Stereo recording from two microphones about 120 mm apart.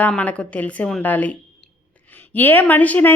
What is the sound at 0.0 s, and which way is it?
A woman's voice, 10° left (ahead or behind).